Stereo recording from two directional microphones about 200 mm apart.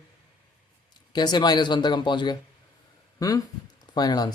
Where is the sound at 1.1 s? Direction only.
20° left (ahead or behind).